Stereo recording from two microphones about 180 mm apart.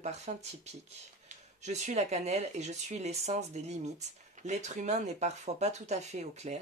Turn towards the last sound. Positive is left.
turn(degrees=-40)  # may be behind; listen again after turning